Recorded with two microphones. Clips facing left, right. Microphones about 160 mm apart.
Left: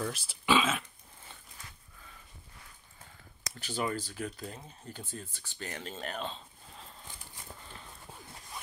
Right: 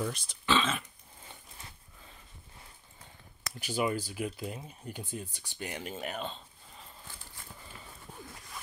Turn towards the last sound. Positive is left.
turn(degrees=20)  # may be behind; listen again after turning